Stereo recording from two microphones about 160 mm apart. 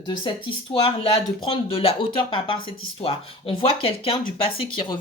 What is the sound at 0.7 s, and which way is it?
Speech, 35° left (ahead or behind).